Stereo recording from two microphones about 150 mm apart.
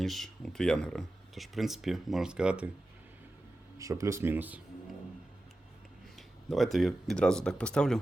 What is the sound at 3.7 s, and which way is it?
Speech, 20° right (ahead or behind).